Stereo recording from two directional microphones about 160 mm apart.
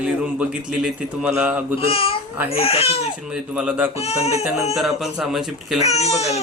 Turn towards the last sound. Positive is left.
turn(degrees=40)  # may be behind; listen again after turning